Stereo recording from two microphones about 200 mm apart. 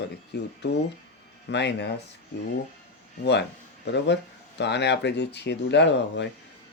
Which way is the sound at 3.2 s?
60° left (ahead or behind).